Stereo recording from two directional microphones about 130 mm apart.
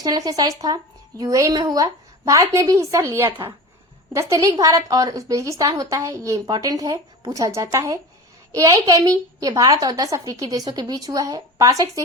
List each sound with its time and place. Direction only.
0.0 s a woman's voice: 30° right (ahead or behind)